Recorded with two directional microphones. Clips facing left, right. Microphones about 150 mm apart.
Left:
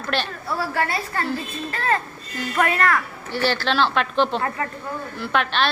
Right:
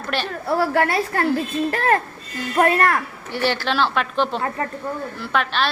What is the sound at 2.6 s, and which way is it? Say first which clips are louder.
Speech: right 3 dB; 45° right (ahead or behind).